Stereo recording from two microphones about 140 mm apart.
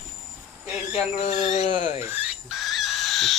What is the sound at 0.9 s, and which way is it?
Speech, 50° left (ahead or behind).